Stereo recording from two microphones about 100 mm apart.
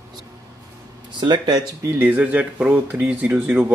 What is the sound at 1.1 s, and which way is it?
Speech, 50° right (ahead or behind).